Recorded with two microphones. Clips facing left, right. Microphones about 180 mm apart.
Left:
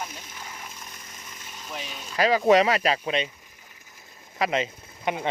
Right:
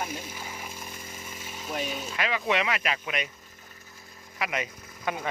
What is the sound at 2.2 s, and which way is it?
Speech, 35° left (ahead or behind).